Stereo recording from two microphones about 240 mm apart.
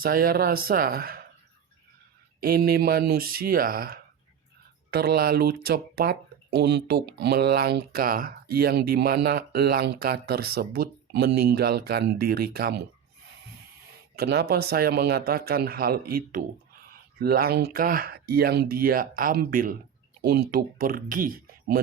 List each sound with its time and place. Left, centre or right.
0.0 s speech: right
2.4 s speech: right
14.2 s speech: right